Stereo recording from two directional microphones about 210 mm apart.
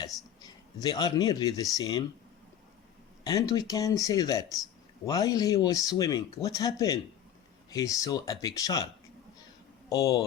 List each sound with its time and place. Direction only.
0.4 s speech: 20° left (ahead or behind)
3.2 s speech: 15° left (ahead or behind)
9.9 s speech: 15° left (ahead or behind)